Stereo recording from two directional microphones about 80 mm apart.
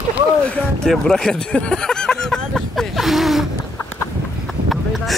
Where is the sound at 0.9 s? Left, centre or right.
Centre.